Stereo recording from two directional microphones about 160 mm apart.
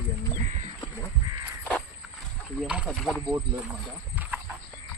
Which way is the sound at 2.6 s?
10° right (ahead or behind).